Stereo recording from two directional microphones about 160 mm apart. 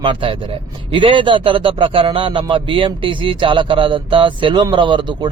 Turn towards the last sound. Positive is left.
turn(degrees=-30)  # may be behind; listen again after turning